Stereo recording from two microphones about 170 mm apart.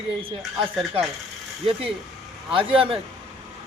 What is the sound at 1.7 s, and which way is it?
Speech, 30° right (ahead or behind).